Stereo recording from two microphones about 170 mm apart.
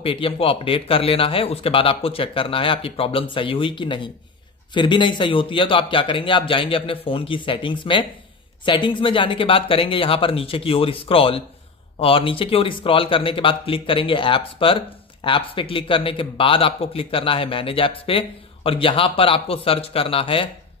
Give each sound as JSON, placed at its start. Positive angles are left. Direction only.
{"t": 0.0, "sound": "a man's voice", "side_deg": 30}